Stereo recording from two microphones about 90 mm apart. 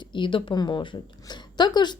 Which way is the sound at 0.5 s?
55° left (ahead or behind).